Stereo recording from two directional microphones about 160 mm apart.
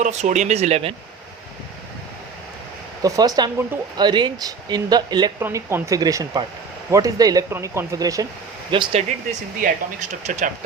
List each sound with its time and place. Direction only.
0.0 s speech: 45° right (ahead or behind)
3.0 s speech: 25° right (ahead or behind)
5.4 s speech: 15° right (ahead or behind)
8.7 s speech: 35° right (ahead or behind)
9.6 s speech: 50° right (ahead or behind)